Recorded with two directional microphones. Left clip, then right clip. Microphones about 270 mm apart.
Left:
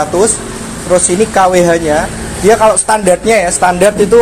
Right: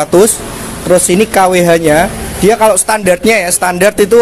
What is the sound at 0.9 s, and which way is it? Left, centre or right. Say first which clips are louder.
Speech: right 1 dB; right.